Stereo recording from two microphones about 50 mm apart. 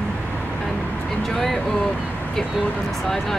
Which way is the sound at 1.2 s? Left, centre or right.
Centre.